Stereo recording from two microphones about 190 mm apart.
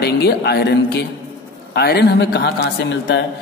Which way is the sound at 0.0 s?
55° left (ahead or behind).